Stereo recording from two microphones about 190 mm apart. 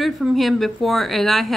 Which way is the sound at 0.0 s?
Centre (ahead or behind).